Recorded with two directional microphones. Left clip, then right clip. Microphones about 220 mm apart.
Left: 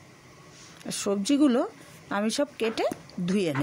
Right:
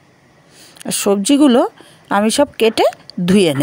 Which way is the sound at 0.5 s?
35° right (ahead or behind).